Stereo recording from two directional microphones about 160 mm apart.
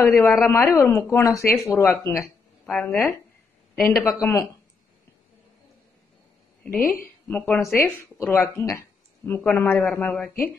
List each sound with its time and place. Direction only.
0.5 s speech: 15° left (ahead or behind)
6.6 s a woman's voice: 10° left (ahead or behind)